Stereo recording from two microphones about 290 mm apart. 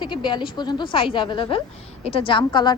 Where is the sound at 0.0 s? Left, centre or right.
Centre.